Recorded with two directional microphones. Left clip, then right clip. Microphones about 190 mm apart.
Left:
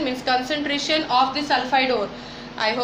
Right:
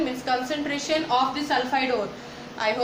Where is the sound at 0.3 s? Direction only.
20° left (ahead or behind).